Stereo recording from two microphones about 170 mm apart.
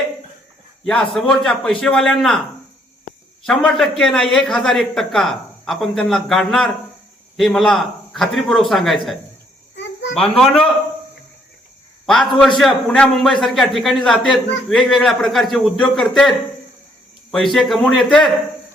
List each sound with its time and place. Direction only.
0.9 s a man's voice: 5° left (ahead or behind)
3.4 s a man's voice: centre (ahead or behind)
9.7 s a sound: 90° left
10.2 s a man's voice: centre (ahead or behind)
12.0 s a man's voice: centre (ahead or behind)
17.3 s a man's voice: centre (ahead or behind)